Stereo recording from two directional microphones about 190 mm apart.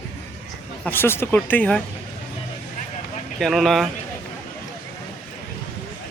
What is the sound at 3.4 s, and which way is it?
Speech, centre (ahead or behind).